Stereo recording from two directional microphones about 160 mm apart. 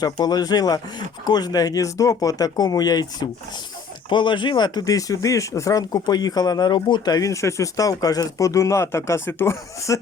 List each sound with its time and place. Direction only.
0.0 s speech: 25° left (ahead or behind)